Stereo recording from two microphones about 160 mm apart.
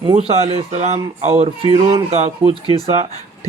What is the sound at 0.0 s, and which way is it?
A man's voice, 35° right (ahead or behind).